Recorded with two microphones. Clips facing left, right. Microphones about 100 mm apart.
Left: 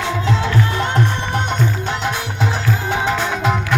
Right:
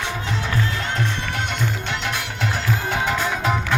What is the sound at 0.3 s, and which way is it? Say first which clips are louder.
Music: left 6 dB; 90° left.